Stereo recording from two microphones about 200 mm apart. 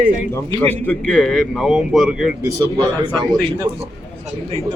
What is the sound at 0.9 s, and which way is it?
A man's voice, 10° left (ahead or behind).